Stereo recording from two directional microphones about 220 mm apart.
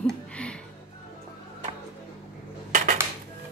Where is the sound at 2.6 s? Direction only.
35° right (ahead or behind).